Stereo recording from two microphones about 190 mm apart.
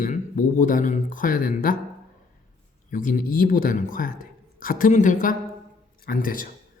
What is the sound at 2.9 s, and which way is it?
Speech, 45° left (ahead or behind).